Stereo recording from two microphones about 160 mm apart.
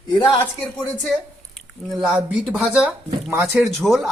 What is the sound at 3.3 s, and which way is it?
Speech, 15° right (ahead or behind).